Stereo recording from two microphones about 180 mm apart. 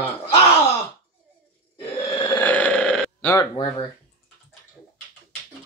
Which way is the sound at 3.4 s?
30° left (ahead or behind).